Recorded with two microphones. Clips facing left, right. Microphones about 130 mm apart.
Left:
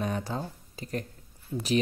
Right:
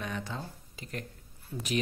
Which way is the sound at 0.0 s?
35° left (ahead or behind).